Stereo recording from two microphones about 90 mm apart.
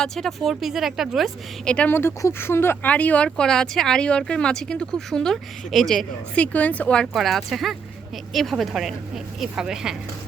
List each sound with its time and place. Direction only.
0.0 s speech: 5° left (ahead or behind)
1.6 s speech: 10° left (ahead or behind)
1.9 s speech: 25° left (ahead or behind)
7.1 s speech: centre (ahead or behind)